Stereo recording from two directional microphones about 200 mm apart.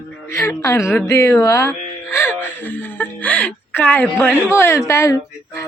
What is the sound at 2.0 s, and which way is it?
Music, 15° left (ahead or behind).